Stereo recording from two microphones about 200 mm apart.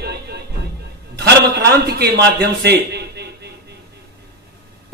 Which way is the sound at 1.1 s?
55° right (ahead or behind).